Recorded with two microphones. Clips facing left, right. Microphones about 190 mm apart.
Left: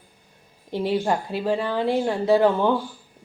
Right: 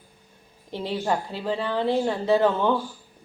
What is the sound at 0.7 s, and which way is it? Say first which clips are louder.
A woman's voice: left 4 dB; 15° left (ahead or behind).